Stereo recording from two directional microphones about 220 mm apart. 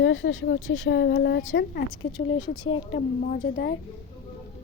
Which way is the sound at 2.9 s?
40° left (ahead or behind).